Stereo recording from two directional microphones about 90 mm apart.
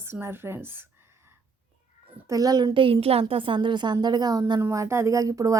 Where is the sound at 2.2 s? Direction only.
40° right (ahead or behind).